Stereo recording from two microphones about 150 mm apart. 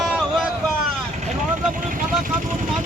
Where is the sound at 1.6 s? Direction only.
65° right (ahead or behind).